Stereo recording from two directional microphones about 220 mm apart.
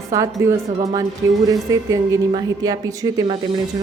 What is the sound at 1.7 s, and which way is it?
A woman's voice, 15° right (ahead or behind).